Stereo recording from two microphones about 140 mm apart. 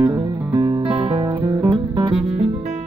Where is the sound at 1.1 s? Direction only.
35° right (ahead or behind).